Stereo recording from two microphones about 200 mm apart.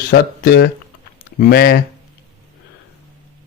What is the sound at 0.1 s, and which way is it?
Speech, 50° left (ahead or behind).